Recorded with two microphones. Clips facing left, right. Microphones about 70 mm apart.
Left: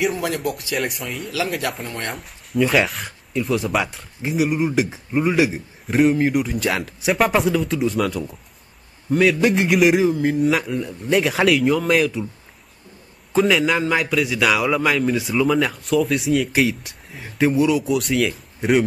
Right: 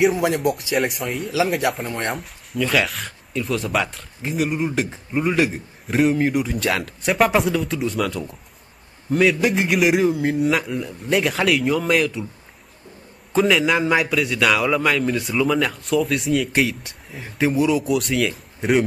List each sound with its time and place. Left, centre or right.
0.2 s speech: centre
0.7 s a man's voice: centre
1.9 s speech: right
2.1 s a man's voice: centre
13.3 s a man's voice: centre